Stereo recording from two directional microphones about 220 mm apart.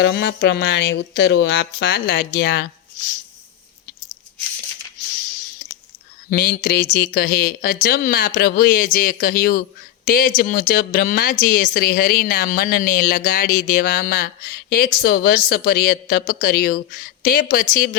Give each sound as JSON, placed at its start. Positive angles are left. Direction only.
{"t": 0.0, "sound": "a woman's voice", "side_deg": 50}
{"t": 6.3, "sound": "a woman's voice", "side_deg": 40}